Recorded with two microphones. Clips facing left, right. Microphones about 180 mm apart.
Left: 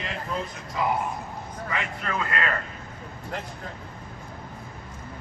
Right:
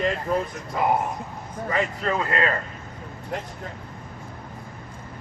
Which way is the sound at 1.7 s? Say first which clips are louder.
Right 6 dB; 35° right (ahead or behind).